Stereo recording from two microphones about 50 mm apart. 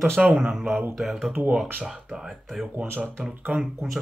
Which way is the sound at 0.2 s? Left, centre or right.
Right.